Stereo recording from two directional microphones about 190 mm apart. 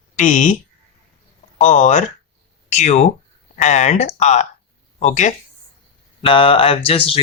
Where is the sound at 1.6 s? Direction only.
40° left (ahead or behind).